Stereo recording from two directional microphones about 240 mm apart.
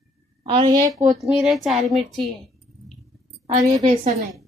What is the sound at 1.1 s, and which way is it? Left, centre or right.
Speech, centre.